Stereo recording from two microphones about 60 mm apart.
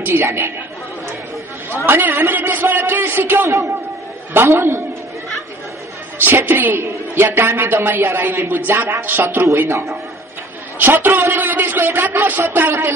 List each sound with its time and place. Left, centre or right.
0.0 s a woman's voice: right
1.9 s speech: right
3.4 s a man's voice: right
4.3 s a man's voice: right
6.1 s speech: right
6.8 s speech: right
9.7 s a man's voice: right
11.0 s speech: right